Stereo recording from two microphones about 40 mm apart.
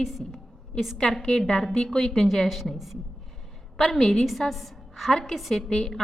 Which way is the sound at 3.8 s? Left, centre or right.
Centre.